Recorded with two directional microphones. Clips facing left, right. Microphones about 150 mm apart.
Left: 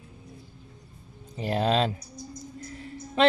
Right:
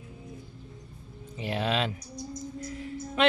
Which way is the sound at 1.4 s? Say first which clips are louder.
Left 4 dB; 40° left (ahead or behind).